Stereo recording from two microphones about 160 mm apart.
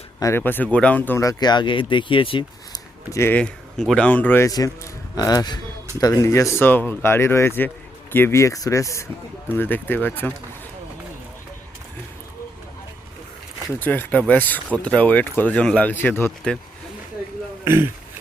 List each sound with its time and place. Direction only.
0.2 s speech: 15° left (ahead or behind); by 2.8 s 35° left (ahead or behind)
3.1 s speech: 15° left (ahead or behind)
13.7 s speech: 10° left (ahead or behind)